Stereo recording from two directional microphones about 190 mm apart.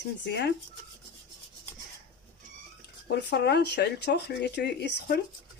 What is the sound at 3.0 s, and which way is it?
Speech, 60° left (ahead or behind).